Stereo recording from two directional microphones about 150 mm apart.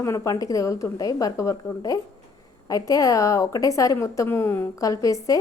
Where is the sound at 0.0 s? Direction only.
20° left (ahead or behind).